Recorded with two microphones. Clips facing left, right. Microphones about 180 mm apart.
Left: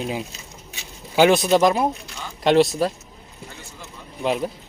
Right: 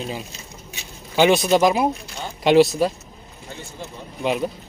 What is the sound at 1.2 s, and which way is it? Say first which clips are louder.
Speech: even; centre (ahead or behind).